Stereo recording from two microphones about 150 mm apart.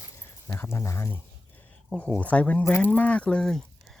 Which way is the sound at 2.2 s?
10° left (ahead or behind).